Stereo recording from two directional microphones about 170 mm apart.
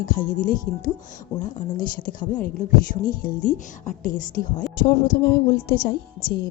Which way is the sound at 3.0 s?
55° left (ahead or behind).